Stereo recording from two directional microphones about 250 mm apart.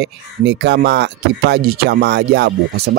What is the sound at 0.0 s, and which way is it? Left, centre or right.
Speech, right.